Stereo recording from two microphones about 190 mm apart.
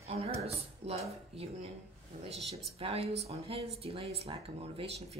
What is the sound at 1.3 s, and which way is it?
Speech, 30° right (ahead or behind).